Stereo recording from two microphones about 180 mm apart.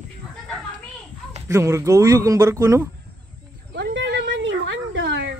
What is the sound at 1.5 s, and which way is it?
Speech, 15° right (ahead or behind).